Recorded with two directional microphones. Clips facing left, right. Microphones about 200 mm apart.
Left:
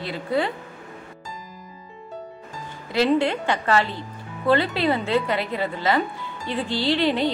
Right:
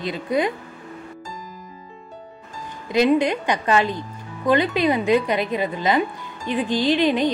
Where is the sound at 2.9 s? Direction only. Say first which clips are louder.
Right 2 dB; 15° right (ahead or behind).